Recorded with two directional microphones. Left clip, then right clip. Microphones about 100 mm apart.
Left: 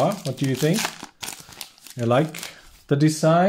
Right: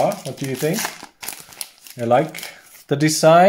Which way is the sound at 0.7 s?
15° left (ahead or behind).